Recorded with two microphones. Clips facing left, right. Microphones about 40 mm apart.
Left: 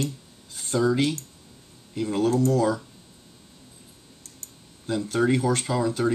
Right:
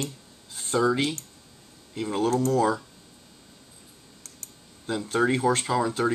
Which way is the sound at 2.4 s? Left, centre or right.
Right.